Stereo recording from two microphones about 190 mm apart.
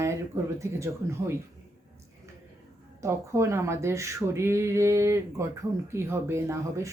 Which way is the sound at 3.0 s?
15° right (ahead or behind).